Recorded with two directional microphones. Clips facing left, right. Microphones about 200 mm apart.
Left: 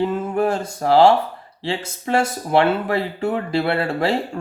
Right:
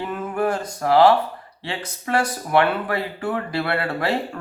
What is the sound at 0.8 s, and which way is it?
Speech, 25° left (ahead or behind).